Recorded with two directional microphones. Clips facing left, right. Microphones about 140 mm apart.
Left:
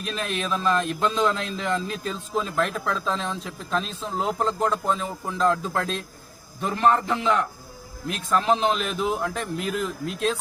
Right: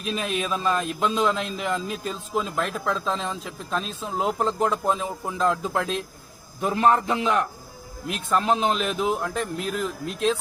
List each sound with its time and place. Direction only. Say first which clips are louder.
0.0 s a man's voice: right 2 dB; 5° right (ahead or behind)
6.6 s a man's voice: right 1 dB; 15° right (ahead or behind)
8.0 s a man's voice: even; centre (ahead or behind)